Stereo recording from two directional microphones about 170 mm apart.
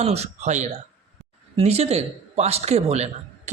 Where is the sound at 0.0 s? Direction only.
40° right (ahead or behind).